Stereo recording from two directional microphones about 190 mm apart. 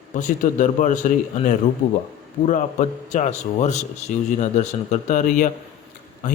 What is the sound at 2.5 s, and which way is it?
A man's voice, 40° left (ahead or behind).